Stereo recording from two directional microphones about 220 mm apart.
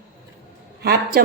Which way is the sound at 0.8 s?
45° right (ahead or behind).